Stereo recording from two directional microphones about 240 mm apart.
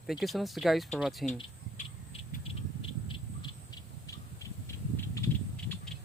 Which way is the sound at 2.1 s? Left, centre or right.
Left.